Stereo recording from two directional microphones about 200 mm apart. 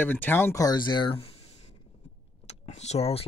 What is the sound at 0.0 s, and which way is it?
Speech, 10° left (ahead or behind).